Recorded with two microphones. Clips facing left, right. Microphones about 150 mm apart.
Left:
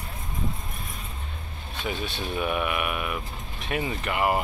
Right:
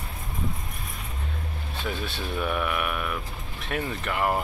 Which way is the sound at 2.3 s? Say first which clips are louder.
Even; 5° left (ahead or behind).